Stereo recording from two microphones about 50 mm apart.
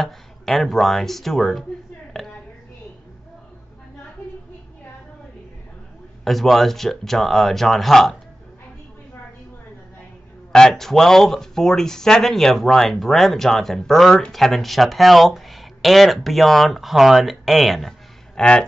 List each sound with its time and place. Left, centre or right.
0.0 s speech: centre
2.1 s a sound: centre
6.2 s speech: centre
10.5 s speech: centre
18.3 s speech: centre